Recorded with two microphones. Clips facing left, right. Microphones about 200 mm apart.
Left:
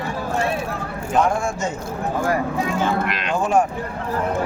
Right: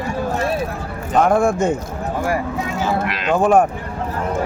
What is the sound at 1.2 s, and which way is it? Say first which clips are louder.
Speech: right 7 dB; 60° right (ahead or behind).